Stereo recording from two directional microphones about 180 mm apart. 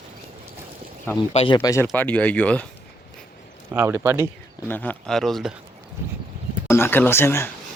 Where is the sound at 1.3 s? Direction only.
35° left (ahead or behind).